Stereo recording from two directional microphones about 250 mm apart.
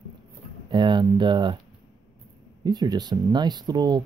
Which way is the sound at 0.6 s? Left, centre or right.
Centre.